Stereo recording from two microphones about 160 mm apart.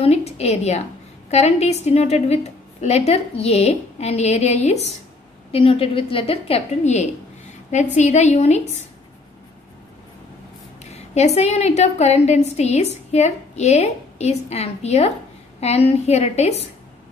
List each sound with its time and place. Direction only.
0.0 s a woman's voice: 40° left (ahead or behind)
10.8 s a woman's voice: 45° left (ahead or behind)